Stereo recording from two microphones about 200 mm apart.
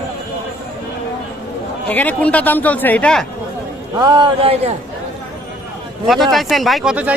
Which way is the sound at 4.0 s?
20° right (ahead or behind).